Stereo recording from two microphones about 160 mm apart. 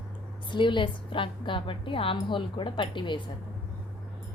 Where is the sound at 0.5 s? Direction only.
30° left (ahead or behind).